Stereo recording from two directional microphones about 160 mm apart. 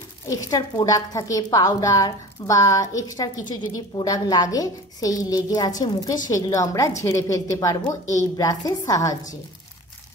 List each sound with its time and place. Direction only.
0.3 s a woman's voice: 20° left (ahead or behind)